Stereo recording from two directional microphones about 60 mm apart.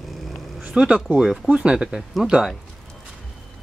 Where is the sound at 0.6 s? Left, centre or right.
Centre.